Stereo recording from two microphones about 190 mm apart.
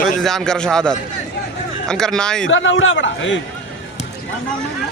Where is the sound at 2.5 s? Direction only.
80° left.